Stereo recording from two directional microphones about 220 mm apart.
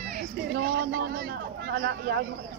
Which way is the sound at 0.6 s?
50° right (ahead or behind).